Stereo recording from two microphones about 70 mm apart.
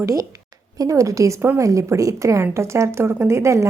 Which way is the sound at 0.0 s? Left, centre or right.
Right.